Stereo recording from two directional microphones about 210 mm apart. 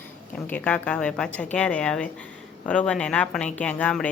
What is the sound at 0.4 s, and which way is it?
A woman's voice, 5° left (ahead or behind).